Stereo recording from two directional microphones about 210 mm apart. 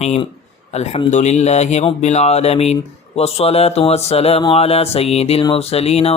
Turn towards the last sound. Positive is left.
turn(degrees=30)  # may be behind; listen again after turning